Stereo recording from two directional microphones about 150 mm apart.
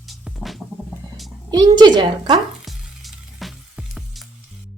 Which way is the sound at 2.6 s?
Centre (ahead or behind).